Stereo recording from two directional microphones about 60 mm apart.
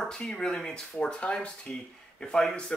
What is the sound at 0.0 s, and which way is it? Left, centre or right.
Speech, centre.